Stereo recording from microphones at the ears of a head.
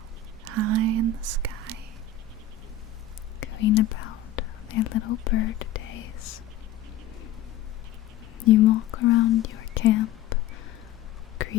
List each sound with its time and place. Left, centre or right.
0.4 s whispering: right
3.4 s whispering: left
8.4 s speech: left